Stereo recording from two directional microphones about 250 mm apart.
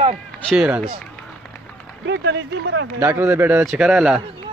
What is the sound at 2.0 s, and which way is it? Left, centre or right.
Speech, right.